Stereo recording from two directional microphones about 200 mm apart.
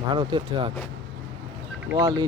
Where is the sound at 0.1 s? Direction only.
25° right (ahead or behind).